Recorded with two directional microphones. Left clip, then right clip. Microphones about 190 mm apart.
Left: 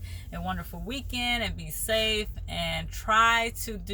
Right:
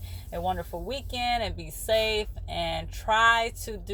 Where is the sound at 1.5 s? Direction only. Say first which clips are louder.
Right 2 dB; 10° left (ahead or behind).